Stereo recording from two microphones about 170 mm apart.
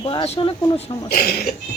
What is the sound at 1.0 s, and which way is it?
Speech, 65° left (ahead or behind).